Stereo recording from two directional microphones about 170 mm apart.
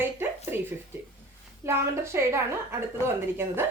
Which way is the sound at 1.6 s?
15° right (ahead or behind).